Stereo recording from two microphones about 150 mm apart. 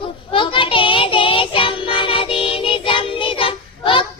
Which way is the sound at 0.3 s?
35° left (ahead or behind).